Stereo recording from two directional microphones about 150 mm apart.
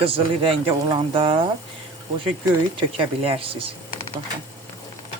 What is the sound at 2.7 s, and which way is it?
Speech, 35° right (ahead or behind).